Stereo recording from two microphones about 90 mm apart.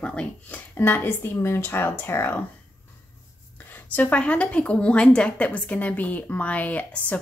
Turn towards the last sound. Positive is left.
turn(degrees=15)  # may be behind; listen again after turning